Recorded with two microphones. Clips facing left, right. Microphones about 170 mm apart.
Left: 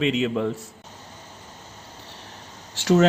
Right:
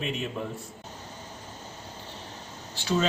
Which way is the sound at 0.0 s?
90° left.